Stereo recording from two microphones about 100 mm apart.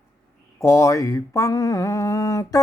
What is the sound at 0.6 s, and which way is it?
Mantra, 30° left (ahead or behind).